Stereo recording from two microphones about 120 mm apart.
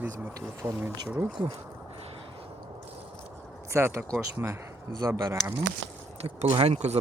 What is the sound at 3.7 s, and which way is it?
Speech, 20° right (ahead or behind).